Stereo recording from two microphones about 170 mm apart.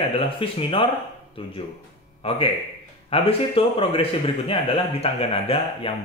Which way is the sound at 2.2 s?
35° left (ahead or behind).